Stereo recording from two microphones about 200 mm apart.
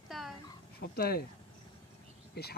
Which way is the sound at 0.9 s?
50° left (ahead or behind).